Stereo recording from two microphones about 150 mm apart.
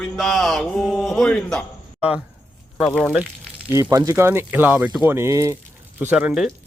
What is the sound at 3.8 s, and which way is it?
A man's voice, 25° right (ahead or behind).